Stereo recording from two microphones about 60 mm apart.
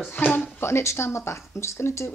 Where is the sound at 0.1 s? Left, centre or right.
Left.